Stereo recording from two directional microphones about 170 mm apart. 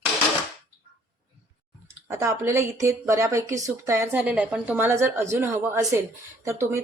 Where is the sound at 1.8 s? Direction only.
15° right (ahead or behind).